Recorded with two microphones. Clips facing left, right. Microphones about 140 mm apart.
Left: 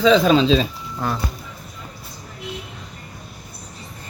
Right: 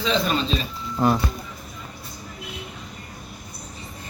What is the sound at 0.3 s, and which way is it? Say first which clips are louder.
Speech: left 9 dB; 90° left.